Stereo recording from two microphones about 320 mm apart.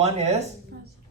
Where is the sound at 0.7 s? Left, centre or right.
Right.